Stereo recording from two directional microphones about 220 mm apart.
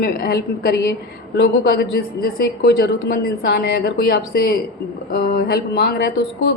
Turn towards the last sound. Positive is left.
turn(degrees=50)  # may be behind; listen again after turning